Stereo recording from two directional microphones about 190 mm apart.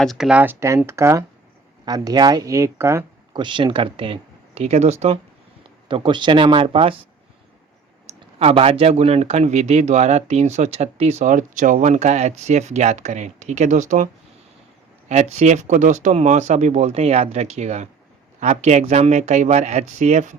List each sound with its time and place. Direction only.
0.0 s speech: centre (ahead or behind); by 6.9 s 30° right (ahead or behind)
8.4 s speech: 30° right (ahead or behind)
15.1 s speech: 35° right (ahead or behind)